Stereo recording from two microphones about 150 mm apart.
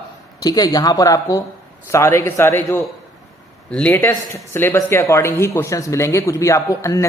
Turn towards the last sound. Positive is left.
turn(degrees=20)  # may be behind; listen again after turning